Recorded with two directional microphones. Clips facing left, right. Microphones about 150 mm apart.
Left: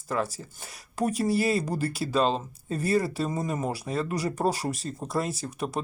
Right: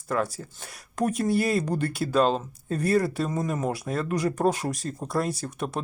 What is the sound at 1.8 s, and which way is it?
Speech, 30° left (ahead or behind).